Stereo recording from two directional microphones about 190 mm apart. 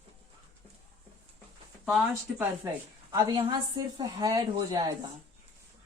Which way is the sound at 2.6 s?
15° right (ahead or behind).